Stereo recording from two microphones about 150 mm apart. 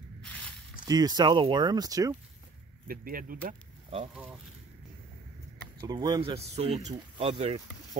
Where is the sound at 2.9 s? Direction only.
70° right (ahead or behind).